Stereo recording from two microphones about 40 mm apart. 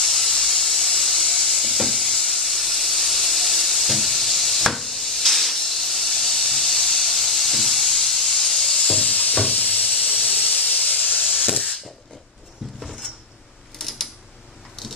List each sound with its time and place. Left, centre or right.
0.0 s steam: centre
9.1 s a sound: left
10.2 s hiss: left
11.2 s spray: centre
13.7 s typing: centre